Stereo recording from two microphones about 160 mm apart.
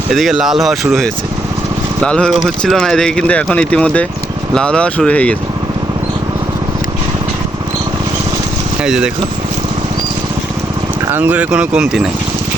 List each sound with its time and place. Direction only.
0.1 s speech: centre (ahead or behind)
8.8 s speech: 5° right (ahead or behind)
11.1 s speech: 10° right (ahead or behind)